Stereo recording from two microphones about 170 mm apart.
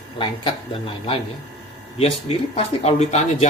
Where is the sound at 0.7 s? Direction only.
35° left (ahead or behind).